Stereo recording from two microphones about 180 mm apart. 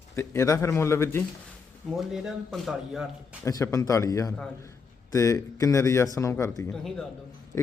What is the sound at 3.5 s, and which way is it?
A man's voice, 20° left (ahead or behind).